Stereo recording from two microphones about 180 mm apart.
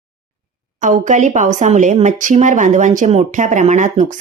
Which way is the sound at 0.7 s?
45° right (ahead or behind).